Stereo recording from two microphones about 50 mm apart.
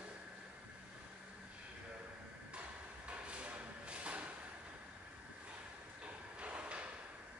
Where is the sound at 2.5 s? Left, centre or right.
Right.